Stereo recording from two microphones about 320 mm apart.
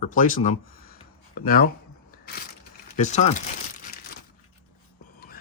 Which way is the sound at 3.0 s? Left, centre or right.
Left.